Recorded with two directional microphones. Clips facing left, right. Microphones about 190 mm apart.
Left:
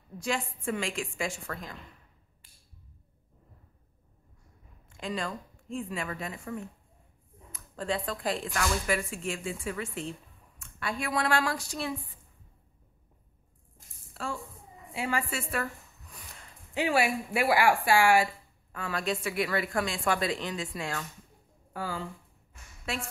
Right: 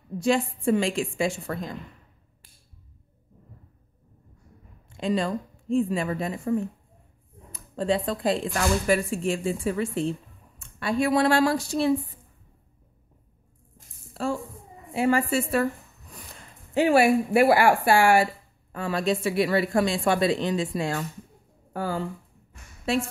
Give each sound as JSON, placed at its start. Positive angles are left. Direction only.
{"t": 0.2, "sound": "speech", "side_deg": -25}
{"t": 4.8, "sound": "a sound", "side_deg": -25}
{"t": 5.7, "sound": "speech", "side_deg": -30}
{"t": 14.1, "sound": "speech", "side_deg": -35}
{"t": 16.7, "sound": "speech", "side_deg": -45}
{"t": 18.7, "sound": "speech", "side_deg": -30}
{"t": 21.7, "sound": "speech", "side_deg": -50}